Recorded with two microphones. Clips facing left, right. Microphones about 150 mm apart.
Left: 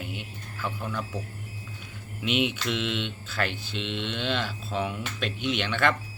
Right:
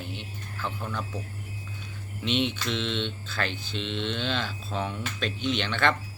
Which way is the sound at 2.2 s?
10° left (ahead or behind).